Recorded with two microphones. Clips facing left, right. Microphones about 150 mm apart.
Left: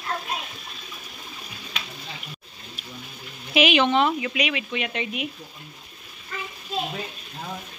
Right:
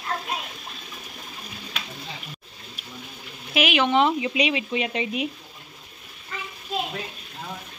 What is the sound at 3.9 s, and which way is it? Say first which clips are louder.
Speech: right 1 dB; 20° right (ahead or behind).